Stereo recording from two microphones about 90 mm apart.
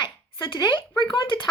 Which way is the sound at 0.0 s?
70° left (ahead or behind).